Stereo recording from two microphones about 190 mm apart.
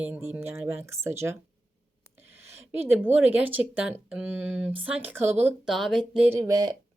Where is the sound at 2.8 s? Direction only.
10° right (ahead or behind).